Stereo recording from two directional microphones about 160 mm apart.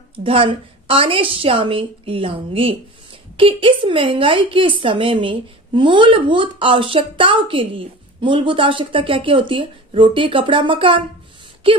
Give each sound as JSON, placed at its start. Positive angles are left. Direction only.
{"t": 0.1, "sound": "a woman's voice", "side_deg": -35}